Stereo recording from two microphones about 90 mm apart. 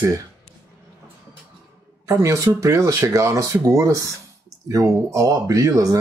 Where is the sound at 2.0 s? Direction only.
35° right (ahead or behind).